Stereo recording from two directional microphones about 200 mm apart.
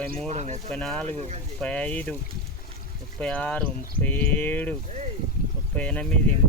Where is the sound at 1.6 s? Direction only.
5° left (ahead or behind).